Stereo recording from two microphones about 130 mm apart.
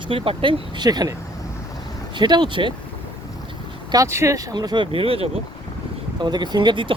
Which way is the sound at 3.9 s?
25° right (ahead or behind).